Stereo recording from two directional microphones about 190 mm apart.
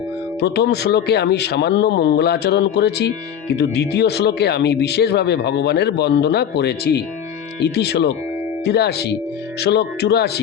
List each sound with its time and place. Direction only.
0.3 s speech: 60° left (ahead or behind)